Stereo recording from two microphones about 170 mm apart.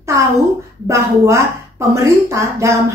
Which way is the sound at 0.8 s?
15° right (ahead or behind).